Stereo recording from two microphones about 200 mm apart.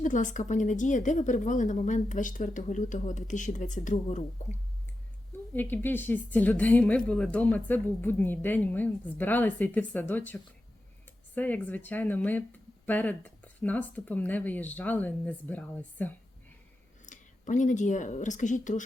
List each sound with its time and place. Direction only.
0.0 s a woman's voice: 40° left (ahead or behind)
5.7 s speech: 10° left (ahead or behind)
11.3 s speech: 10° left (ahead or behind)
17.1 s a woman's voice: 40° left (ahead or behind)